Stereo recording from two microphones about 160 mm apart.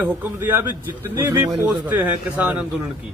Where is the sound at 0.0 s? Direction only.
10° right (ahead or behind).